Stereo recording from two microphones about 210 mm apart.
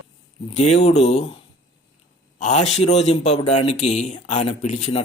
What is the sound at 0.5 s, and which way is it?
Speech, 30° left (ahead or behind).